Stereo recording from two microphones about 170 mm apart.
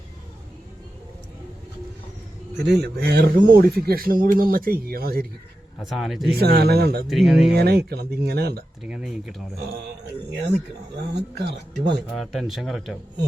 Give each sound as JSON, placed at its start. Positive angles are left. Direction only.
{"t": 2.6, "sound": "speech", "side_deg": -80}
{"t": 5.8, "sound": "speech", "side_deg": 0}
{"t": 6.4, "sound": "speech", "side_deg": -65}
{"t": 7.1, "sound": "speech", "side_deg": 0}
{"t": 7.5, "sound": "speech", "side_deg": -70}
{"t": 8.8, "sound": "speech", "side_deg": -5}
{"t": 11.1, "sound": "speech", "side_deg": -80}
{"t": 12.1, "sound": "speech", "side_deg": 0}